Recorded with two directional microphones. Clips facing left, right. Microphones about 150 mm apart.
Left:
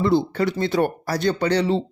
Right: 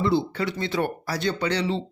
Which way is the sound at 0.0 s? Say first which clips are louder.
Left 4 dB; 45° left (ahead or behind).